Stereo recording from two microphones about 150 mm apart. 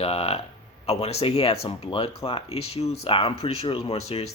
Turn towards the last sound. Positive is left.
turn(degrees=45)  # may be behind; listen again after turning